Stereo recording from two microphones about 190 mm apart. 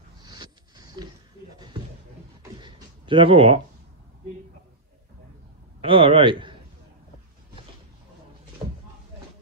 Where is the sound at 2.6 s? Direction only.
25° right (ahead or behind).